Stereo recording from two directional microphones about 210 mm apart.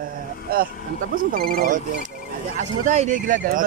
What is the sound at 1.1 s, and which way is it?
Speech, 45° right (ahead or behind).